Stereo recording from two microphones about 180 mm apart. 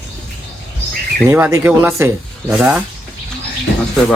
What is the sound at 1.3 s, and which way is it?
Speech, 15° right (ahead or behind).